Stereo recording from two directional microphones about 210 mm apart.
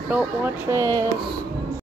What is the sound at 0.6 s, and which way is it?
Speech, 15° right (ahead or behind).